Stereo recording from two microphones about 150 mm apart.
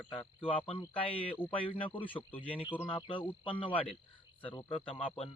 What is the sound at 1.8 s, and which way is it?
Speech, 35° left (ahead or behind).